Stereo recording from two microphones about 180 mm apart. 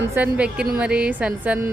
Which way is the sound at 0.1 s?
10° right (ahead or behind).